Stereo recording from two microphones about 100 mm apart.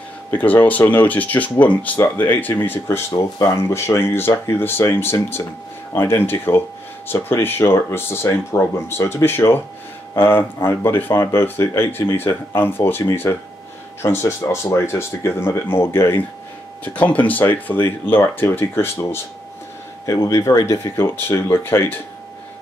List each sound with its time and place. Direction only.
0.3 s speech: 20° left (ahead or behind)
16.8 s speech: 15° left (ahead or behind)
20.1 s speech: 35° left (ahead or behind)